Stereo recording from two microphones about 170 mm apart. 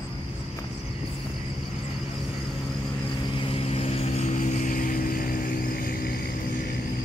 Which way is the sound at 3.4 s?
35° left (ahead or behind).